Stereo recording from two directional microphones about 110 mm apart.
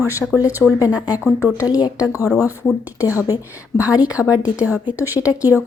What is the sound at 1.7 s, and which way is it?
Speech, 40° left (ahead or behind).